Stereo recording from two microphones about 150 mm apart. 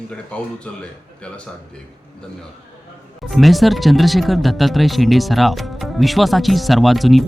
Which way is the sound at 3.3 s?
Centre (ahead or behind).